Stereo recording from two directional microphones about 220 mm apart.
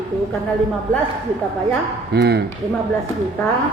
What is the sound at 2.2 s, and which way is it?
Speech, 50° right (ahead or behind).